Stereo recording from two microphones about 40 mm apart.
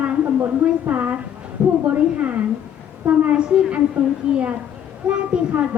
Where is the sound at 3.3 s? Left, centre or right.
Right.